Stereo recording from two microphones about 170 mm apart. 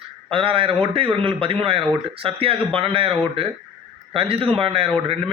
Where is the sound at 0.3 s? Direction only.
30° right (ahead or behind).